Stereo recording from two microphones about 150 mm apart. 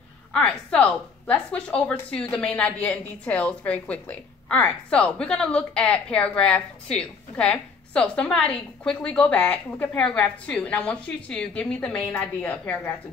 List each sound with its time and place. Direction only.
0.3 s a woman's voice: 5° left (ahead or behind)